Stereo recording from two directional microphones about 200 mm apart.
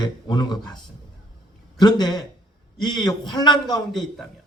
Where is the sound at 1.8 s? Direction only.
20° left (ahead or behind).